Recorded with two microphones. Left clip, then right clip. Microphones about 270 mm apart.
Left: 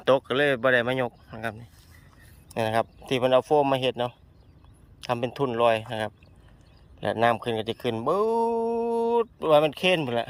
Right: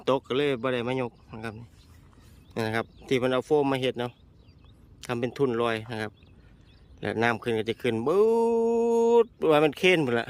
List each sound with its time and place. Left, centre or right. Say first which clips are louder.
0.0 s speech: left 4 dB; centre
7.0 s speech: left 3 dB; centre